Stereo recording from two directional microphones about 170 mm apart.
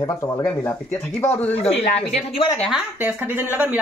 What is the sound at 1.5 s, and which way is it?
Speech, 40° left (ahead or behind).